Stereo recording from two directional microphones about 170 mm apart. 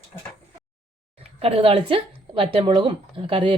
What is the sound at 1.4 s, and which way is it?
Speech, 35° right (ahead or behind).